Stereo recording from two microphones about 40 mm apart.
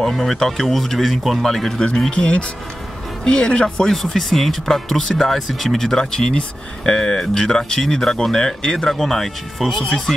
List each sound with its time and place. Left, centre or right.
0.1 s speech: centre
2.0 s speech: left
3.9 s speech: centre